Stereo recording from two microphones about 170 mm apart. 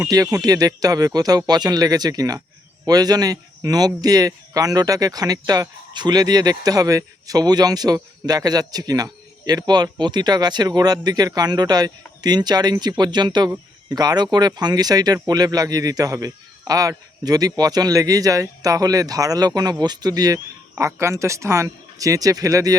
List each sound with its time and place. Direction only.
0.0 s speech: 20° right (ahead or behind)